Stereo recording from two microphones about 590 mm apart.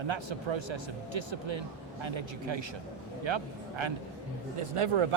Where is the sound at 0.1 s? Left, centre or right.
Right.